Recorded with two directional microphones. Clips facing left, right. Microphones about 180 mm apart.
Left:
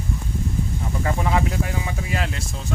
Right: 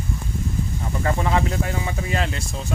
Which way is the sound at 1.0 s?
5° left (ahead or behind).